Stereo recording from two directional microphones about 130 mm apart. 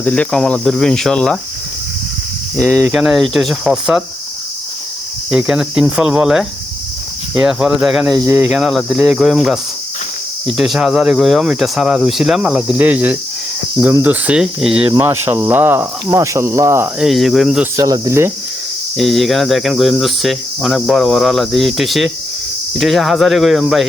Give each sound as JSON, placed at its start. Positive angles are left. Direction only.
{"t": 0.0, "sound": "cricket", "side_deg": 10}
{"t": 2.6, "sound": "cricket", "side_deg": 5}
{"t": 5.3, "sound": "speech", "side_deg": -5}
{"t": 6.0, "sound": "cricket", "side_deg": -5}
{"t": 14.0, "sound": "speech", "side_deg": -10}
{"t": 14.8, "sound": "speech", "side_deg": -20}
{"t": 17.0, "sound": "cricket", "side_deg": 0}
{"t": 17.7, "sound": "speech", "side_deg": -25}
{"t": 18.9, "sound": "cricket", "side_deg": 0}